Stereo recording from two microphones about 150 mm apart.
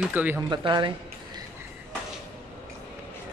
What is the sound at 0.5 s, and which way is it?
Speech, 30° right (ahead or behind).